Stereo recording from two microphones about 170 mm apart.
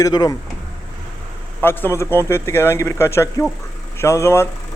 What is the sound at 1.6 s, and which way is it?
Speech, 10° left (ahead or behind).